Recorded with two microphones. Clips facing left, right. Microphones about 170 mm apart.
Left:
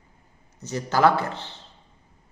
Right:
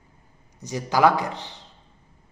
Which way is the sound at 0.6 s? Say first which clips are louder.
Right 1 dB; 15° right (ahead or behind).